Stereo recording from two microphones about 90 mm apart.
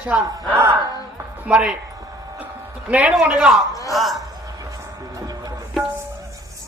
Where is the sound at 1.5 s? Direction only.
15° right (ahead or behind).